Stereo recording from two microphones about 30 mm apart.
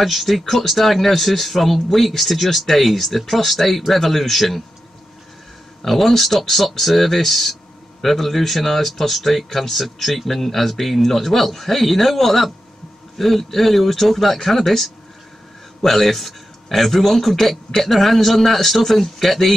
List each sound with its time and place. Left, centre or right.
0.0 s speech: centre
5.8 s speech: centre